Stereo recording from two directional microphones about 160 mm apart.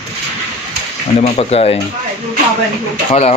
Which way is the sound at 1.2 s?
40° left (ahead or behind).